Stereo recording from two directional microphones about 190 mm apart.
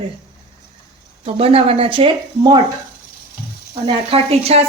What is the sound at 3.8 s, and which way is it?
Speech, 30° right (ahead or behind).